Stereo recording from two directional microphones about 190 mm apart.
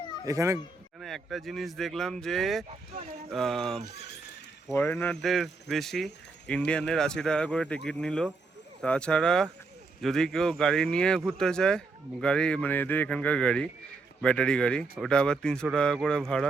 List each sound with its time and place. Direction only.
0.3 s speech: 15° right (ahead or behind)
1.0 s speech: centre (ahead or behind)